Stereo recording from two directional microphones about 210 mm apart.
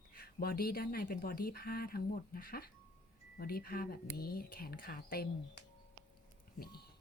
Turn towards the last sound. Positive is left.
turn(degrees=45)  # may be behind; listen again after turning